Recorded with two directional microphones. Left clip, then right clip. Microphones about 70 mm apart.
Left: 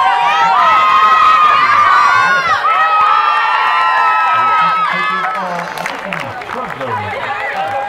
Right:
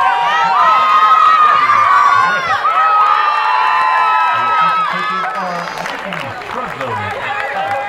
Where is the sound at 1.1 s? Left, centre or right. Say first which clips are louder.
Even; left.